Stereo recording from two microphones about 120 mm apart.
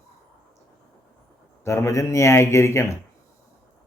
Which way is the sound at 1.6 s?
25° left (ahead or behind).